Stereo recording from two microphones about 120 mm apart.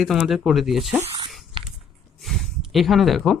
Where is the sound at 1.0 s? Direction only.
45° right (ahead or behind).